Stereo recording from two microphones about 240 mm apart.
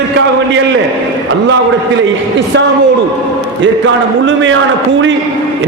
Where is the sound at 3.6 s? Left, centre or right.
Right.